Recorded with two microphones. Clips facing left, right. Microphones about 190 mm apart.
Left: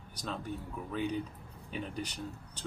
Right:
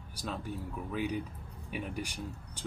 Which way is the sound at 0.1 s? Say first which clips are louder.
Even; 10° right (ahead or behind).